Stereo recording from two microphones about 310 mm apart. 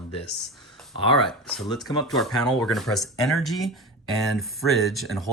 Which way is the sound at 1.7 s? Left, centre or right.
Centre.